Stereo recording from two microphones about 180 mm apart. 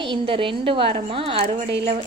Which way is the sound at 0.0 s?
30° right (ahead or behind).